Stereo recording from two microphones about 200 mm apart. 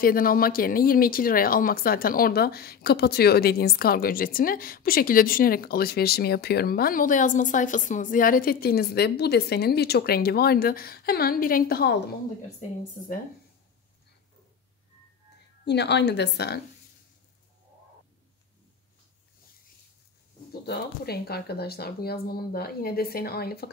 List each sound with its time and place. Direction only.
0.0 s speech: 45° left (ahead or behind)
15.6 s speech: 60° left (ahead or behind)
20.6 s speech: 50° left (ahead or behind)